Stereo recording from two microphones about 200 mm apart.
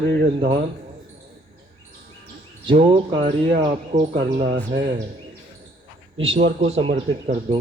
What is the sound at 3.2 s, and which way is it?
Speech, 40° right (ahead or behind).